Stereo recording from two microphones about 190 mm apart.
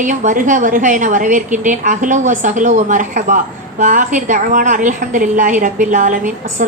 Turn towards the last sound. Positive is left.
turn(degrees=-40)  # may be behind; listen again after turning